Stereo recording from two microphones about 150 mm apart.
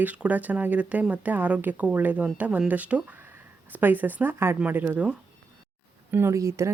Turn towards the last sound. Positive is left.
turn(degrees=-20)  # may be behind; listen again after turning